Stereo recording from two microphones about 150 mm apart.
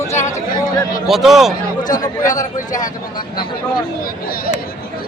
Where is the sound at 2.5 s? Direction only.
60° left (ahead or behind).